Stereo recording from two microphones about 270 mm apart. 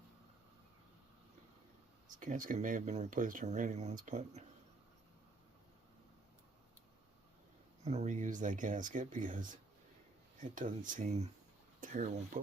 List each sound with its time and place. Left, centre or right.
2.1 s speech: right
7.9 s speech: right